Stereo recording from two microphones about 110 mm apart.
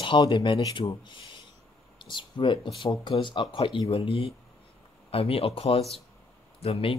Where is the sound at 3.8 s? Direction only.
60° left (ahead or behind).